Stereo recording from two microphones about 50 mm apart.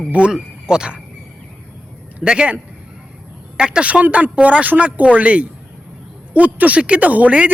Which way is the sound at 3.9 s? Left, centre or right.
Right.